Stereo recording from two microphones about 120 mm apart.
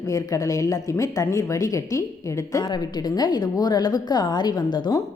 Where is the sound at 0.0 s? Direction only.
30° left (ahead or behind).